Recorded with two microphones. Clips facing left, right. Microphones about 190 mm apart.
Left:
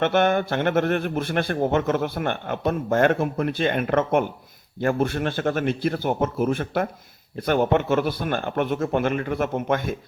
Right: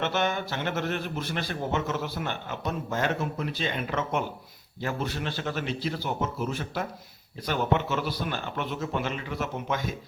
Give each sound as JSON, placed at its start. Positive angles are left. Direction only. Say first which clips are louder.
{"t": 0.0, "sound": "a man's voice", "louder": "left 8 dB", "side_deg": 55}